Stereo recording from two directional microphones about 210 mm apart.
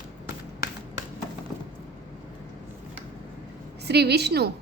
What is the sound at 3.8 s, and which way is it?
Speech, 50° right (ahead or behind).